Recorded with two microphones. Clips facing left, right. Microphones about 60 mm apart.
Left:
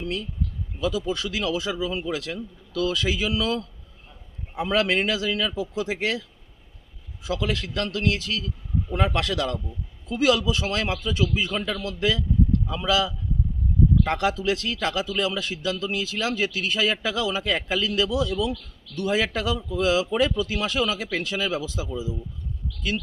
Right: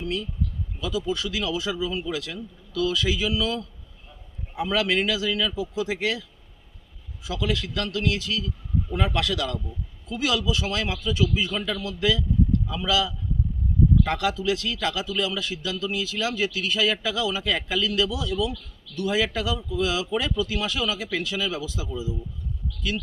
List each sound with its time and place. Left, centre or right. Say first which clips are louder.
0.0 s a man's voice: right 1 dB; left
7.3 s a man's voice: left 1 dB; left